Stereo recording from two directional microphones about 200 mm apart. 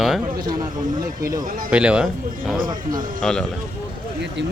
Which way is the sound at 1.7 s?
5° right (ahead or behind).